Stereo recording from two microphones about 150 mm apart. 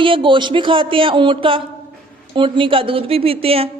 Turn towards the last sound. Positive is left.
turn(degrees=-40)  # may be behind; listen again after turning